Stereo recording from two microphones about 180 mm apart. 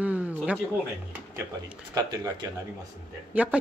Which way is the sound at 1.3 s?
15° right (ahead or behind).